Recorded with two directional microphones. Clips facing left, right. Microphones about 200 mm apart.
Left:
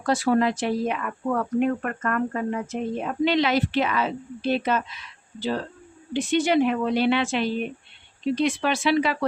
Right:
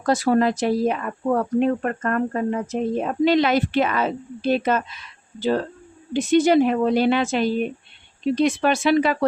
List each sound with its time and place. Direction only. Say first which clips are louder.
0.0 s speech: right 3 dB; 40° right (ahead or behind)